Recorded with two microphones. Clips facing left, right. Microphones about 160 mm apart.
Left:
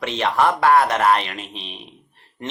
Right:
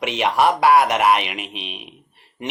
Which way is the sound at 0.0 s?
15° right (ahead or behind).